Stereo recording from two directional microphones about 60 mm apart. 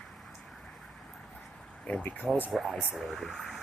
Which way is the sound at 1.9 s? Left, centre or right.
Left.